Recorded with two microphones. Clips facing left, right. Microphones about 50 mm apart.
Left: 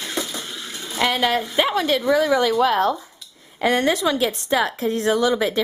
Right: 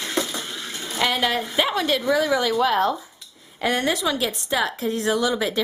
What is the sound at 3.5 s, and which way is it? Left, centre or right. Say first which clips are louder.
Speech: left 3 dB; left.